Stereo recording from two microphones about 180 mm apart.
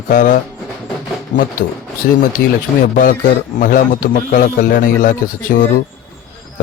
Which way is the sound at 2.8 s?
50° left (ahead or behind).